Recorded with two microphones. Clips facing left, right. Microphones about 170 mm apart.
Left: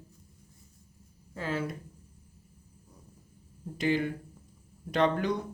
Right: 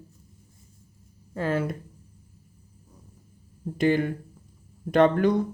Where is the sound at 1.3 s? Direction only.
55° right (ahead or behind).